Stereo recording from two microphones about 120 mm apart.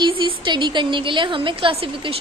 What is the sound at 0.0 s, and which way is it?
A woman's voice, 45° right (ahead or behind).